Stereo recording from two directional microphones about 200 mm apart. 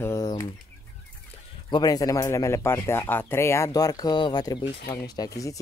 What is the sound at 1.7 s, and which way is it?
Speech, 20° left (ahead or behind).